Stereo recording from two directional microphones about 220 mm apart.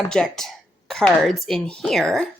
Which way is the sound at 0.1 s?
Centre (ahead or behind).